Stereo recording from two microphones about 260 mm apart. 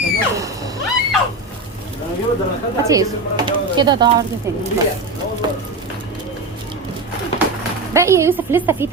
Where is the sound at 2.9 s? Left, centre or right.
Centre.